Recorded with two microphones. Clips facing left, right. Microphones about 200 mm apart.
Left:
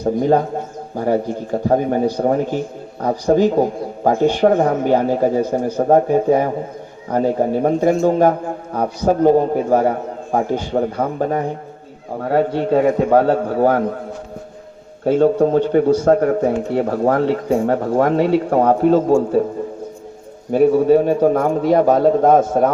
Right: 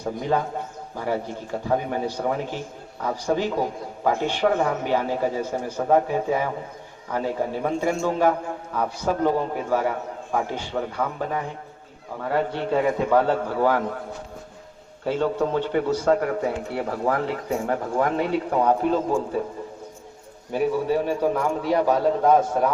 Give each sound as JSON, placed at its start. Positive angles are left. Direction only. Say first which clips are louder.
{"t": 0.0, "sound": "a man's voice", "louder": "left 9 dB", "side_deg": 45}
{"t": 15.0, "sound": "a man's voice", "louder": "left 9 dB", "side_deg": 50}
{"t": 20.5, "sound": "a man's voice", "louder": "left 10 dB", "side_deg": 55}